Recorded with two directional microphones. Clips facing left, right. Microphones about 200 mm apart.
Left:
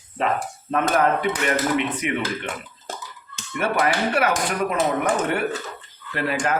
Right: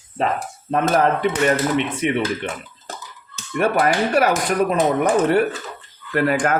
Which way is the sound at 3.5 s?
40° right (ahead or behind).